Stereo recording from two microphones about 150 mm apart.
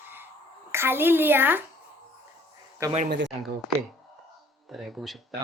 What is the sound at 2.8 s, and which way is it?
Speech, 25° right (ahead or behind).